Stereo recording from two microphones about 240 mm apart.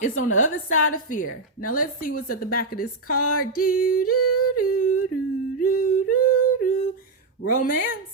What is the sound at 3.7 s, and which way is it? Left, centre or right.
Singing, left.